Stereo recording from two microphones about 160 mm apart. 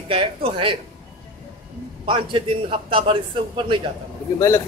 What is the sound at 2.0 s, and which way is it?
A man's voice, 30° right (ahead or behind).